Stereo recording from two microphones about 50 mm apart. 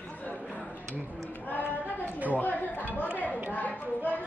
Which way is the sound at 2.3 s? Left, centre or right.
Left.